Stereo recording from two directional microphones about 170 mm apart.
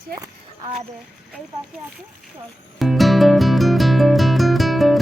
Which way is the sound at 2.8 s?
Centre (ahead or behind).